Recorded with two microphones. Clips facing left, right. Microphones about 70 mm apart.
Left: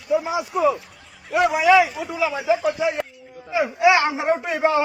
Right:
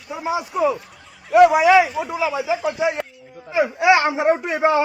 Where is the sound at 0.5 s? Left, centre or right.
Centre.